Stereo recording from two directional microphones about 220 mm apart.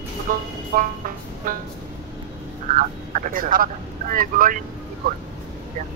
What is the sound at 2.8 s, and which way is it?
Speech, 35° right (ahead or behind).